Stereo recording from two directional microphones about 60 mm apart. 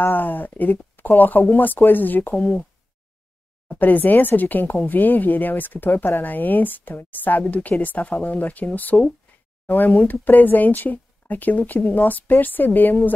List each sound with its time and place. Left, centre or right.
0.0 s speech: left
3.6 s speech: left